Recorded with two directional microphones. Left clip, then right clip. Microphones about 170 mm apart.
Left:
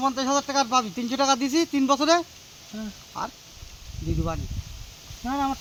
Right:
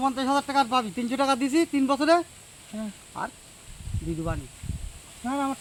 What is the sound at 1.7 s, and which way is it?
Speech, 25° left (ahead or behind).